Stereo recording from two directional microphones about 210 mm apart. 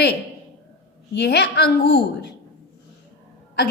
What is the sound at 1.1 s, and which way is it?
A woman's voice, 55° left (ahead or behind).